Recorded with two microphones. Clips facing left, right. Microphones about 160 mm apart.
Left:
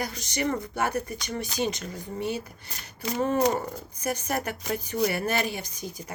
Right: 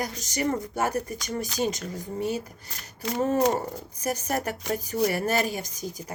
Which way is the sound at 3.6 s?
35° right (ahead or behind).